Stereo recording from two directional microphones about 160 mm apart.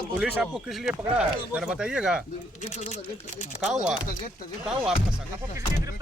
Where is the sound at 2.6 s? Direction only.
45° left (ahead or behind).